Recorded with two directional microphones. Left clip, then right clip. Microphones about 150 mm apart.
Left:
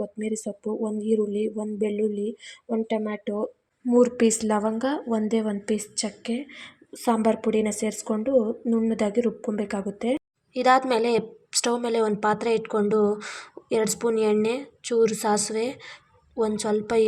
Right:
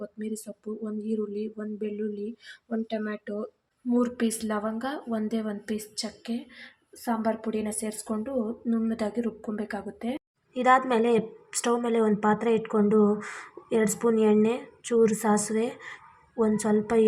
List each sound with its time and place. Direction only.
0.0 s speech: 20° left (ahead or behind)
3.8 s speech: 25° left (ahead or behind)
10.5 s a woman's voice: 65° left (ahead or behind)